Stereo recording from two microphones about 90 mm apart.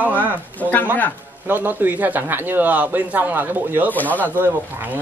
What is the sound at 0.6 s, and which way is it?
Speech, 20° left (ahead or behind).